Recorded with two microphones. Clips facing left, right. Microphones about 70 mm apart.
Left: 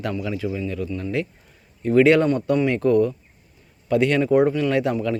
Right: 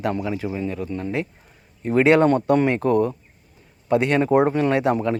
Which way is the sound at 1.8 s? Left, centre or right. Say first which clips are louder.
Even; right.